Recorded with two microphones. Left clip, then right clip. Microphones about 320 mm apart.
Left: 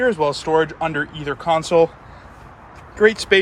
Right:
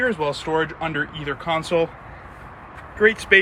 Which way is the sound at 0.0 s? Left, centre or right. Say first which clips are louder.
Left 4 dB; centre.